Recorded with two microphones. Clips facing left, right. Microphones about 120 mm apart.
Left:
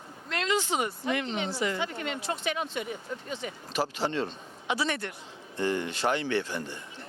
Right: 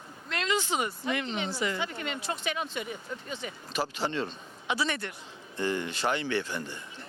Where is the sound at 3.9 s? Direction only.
55° left (ahead or behind).